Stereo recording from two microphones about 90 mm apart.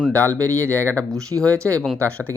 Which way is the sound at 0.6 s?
20° left (ahead or behind).